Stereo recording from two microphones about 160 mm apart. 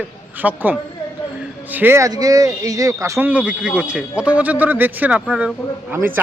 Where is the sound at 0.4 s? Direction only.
10° right (ahead or behind).